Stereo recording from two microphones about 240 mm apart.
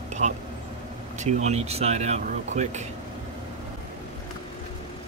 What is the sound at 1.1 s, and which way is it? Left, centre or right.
Speech, right.